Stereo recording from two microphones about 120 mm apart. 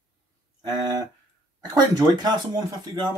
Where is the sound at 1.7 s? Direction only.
30° right (ahead or behind).